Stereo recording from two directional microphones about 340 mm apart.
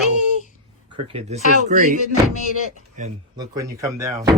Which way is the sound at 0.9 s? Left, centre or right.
Centre.